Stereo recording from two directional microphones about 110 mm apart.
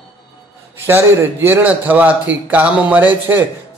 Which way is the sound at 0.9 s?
20° right (ahead or behind).